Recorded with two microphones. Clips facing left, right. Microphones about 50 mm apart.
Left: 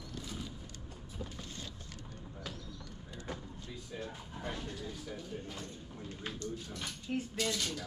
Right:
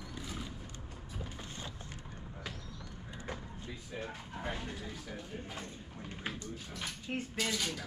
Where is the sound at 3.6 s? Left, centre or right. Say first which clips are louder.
Right 1 dB; right.